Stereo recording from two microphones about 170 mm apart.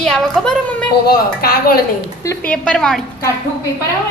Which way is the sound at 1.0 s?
60° left (ahead or behind).